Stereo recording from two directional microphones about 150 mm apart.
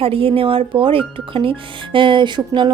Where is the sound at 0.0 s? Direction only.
40° right (ahead or behind).